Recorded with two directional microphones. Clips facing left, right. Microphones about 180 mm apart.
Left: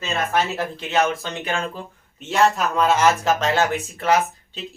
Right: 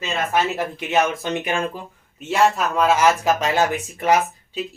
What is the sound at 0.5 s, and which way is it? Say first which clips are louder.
Speech: right 1 dB; 15° right (ahead or behind).